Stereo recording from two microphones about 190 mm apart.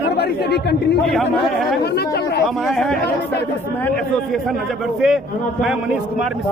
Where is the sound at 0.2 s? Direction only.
60° left (ahead or behind).